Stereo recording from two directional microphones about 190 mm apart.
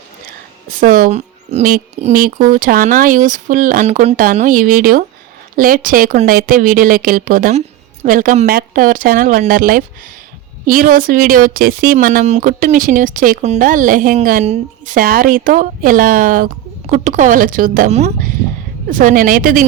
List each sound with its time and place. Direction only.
0.7 s a woman's voice: 45° right (ahead or behind)